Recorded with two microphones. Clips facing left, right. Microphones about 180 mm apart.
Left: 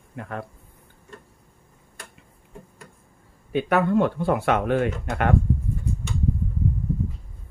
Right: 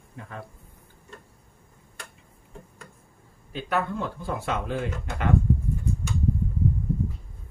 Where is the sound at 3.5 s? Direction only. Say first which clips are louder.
Left 8 dB; 65° left (ahead or behind).